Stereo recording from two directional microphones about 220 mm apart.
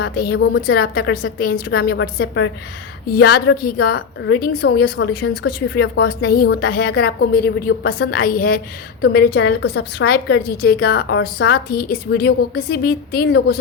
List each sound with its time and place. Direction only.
0.0 s a woman's voice: 50° left (ahead or behind)